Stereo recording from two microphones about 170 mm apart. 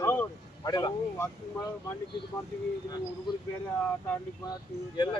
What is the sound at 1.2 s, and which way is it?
Speech, 10° left (ahead or behind).